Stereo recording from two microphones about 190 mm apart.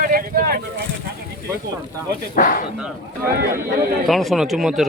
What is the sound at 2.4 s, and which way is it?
Speech, 45° left (ahead or behind).